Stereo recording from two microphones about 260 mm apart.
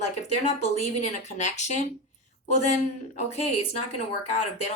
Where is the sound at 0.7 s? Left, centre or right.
Left.